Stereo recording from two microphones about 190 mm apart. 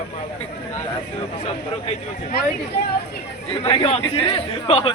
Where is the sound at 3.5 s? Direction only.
30° left (ahead or behind).